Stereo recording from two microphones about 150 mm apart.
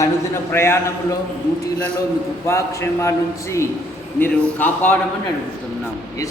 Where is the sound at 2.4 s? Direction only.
20° left (ahead or behind).